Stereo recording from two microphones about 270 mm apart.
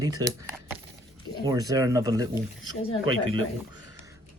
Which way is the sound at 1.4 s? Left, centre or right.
Centre.